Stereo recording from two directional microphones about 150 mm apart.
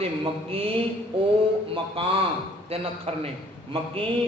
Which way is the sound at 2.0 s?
40° right (ahead or behind).